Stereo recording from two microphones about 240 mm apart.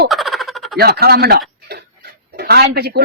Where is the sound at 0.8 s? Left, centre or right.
Right.